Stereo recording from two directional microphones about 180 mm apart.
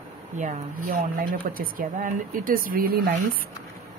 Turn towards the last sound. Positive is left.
turn(degrees=-55)  # may be behind; listen again after turning